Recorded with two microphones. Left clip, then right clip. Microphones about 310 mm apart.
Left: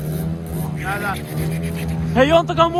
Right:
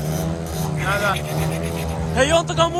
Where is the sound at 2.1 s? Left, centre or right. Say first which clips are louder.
Left 3 dB; centre.